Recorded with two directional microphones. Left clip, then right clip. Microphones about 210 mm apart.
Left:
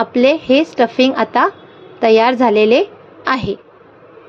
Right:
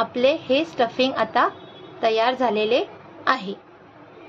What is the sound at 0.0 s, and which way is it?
A woman's voice, 35° left (ahead or behind).